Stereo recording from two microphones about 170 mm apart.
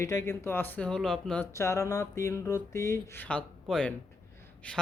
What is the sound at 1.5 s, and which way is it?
Speech, 15° left (ahead or behind).